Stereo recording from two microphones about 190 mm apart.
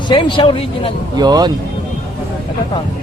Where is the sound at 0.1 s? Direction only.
25° left (ahead or behind).